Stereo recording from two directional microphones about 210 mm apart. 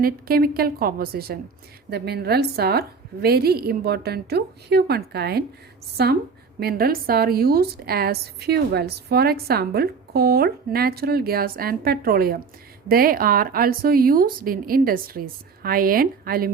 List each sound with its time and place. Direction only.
0.0 s a woman's voice: 45° right (ahead or behind)
6.6 s a woman's voice: 45° right (ahead or behind)